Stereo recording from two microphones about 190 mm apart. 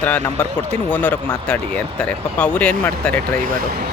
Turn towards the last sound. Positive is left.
turn(degrees=5)  # may be behind; listen again after turning